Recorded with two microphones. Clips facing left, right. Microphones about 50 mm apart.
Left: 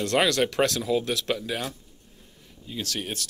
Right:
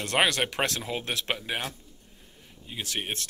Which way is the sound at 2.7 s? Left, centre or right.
Right.